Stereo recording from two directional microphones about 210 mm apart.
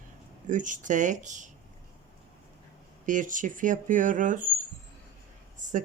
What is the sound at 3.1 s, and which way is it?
Speech, 40° right (ahead or behind).